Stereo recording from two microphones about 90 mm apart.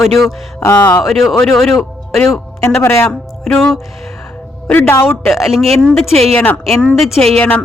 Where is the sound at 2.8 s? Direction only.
30° left (ahead or behind).